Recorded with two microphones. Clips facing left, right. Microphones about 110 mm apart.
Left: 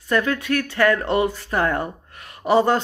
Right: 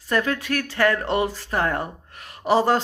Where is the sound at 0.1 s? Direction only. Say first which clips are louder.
Left 2 dB; 35° right (ahead or behind).